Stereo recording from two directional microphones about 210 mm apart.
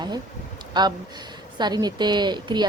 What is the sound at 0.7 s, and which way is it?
Speech, 20° right (ahead or behind).